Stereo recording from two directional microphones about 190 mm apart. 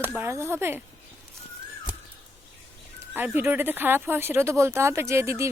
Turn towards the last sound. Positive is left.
turn(degrees=-15)  # may be behind; listen again after turning